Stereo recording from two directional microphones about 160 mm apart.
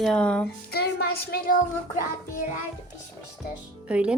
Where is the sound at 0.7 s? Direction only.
80° left.